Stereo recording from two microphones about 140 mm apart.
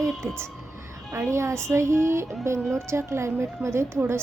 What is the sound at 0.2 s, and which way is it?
A woman's voice, 15° right (ahead or behind).